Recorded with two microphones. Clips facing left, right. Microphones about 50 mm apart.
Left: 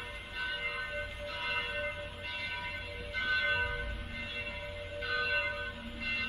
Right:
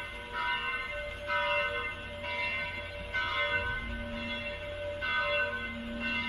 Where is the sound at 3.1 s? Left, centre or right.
Right.